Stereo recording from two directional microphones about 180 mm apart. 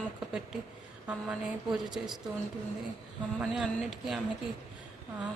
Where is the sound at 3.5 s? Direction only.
5° right (ahead or behind).